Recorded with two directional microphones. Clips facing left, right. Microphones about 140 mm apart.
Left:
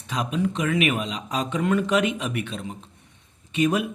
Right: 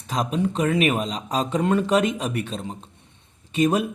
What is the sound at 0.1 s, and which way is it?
Speech, 35° right (ahead or behind).